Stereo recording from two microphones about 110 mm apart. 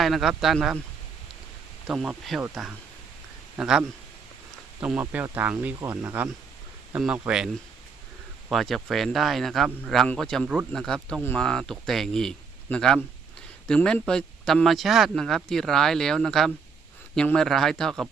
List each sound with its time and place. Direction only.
0.0 s speech: centre (ahead or behind)
1.9 s speech: centre (ahead or behind)